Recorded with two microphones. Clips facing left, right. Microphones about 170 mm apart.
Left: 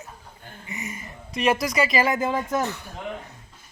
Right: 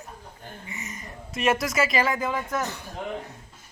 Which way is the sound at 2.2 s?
25° left (ahead or behind).